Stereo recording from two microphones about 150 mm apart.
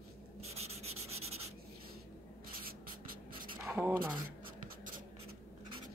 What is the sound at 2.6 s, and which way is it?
Writing, 70° right (ahead or behind).